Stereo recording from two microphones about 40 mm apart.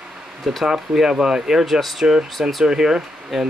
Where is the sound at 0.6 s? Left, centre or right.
Centre.